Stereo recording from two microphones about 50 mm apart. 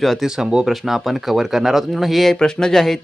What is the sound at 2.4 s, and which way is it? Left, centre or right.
Music, centre.